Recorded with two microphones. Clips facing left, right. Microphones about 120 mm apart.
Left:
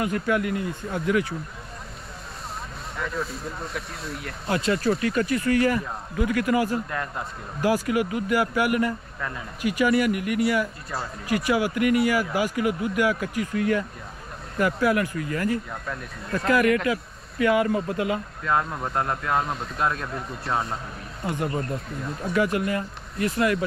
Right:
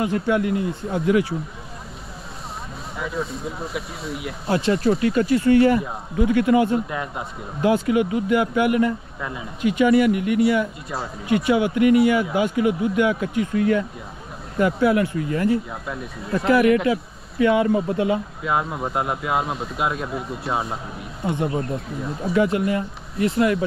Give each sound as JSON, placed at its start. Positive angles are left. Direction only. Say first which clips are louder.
{"t": 0.0, "sound": "speech", "louder": "right 3 dB", "side_deg": -25}
{"t": 3.0, "sound": "speech", "louder": "right 3 dB", "side_deg": 0}
{"t": 4.5, "sound": "speech", "louder": "right 4 dB", "side_deg": -30}
{"t": 6.9, "sound": "speech", "louder": "right 2 dB", "side_deg": -10}
{"t": 7.6, "sound": "speech", "louder": "right 4 dB", "side_deg": -25}
{"t": 9.2, "sound": "speech", "louder": "even", "side_deg": -10}
{"t": 9.6, "sound": "speech", "louder": "right 5 dB", "side_deg": -25}
{"t": 15.7, "sound": "speech", "louder": "right 3 dB", "side_deg": -5}
{"t": 16.3, "sound": "speech", "louder": "right 4 dB", "side_deg": -25}
{"t": 18.4, "sound": "speech", "louder": "right 2 dB", "side_deg": -10}
{"t": 22.3, "sound": "speech", "louder": "right 4 dB", "side_deg": -25}